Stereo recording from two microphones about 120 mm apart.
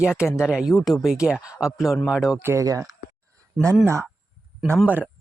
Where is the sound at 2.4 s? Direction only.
25° right (ahead or behind).